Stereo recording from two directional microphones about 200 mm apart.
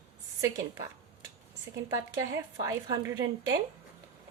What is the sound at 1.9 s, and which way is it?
A woman's voice, 15° right (ahead or behind).